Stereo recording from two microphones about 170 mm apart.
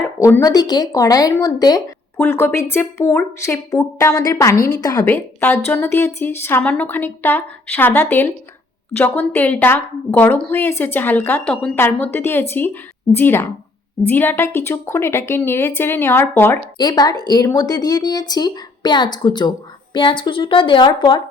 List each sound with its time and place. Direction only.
0.2 s speech: 15° left (ahead or behind)
5.0 s a woman's voice: 10° left (ahead or behind); by 21.2 s 30° left (ahead or behind)